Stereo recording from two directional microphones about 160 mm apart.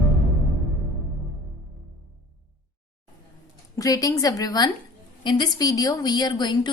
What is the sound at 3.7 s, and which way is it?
A woman's voice, 20° left (ahead or behind).